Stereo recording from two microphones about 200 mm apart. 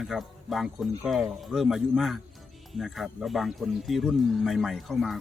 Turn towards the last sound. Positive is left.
turn(degrees=0)  # may be behind; listen again after turning